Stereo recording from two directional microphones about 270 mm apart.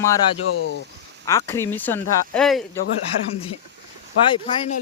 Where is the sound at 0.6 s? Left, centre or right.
Left.